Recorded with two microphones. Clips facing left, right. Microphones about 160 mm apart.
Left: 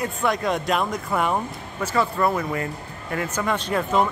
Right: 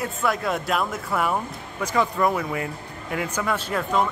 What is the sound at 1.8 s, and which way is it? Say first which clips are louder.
Speech: even; 15° right (ahead or behind).